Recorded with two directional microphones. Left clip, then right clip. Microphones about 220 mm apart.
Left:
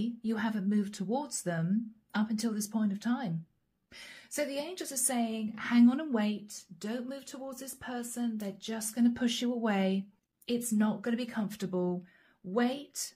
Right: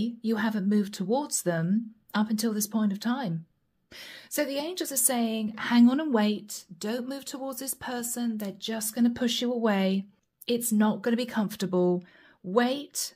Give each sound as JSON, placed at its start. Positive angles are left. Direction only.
{"t": 0.0, "sound": "a woman's voice", "side_deg": -45}